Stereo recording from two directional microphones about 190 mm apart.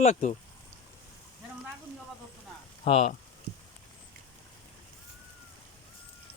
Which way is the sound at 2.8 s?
35° left (ahead or behind).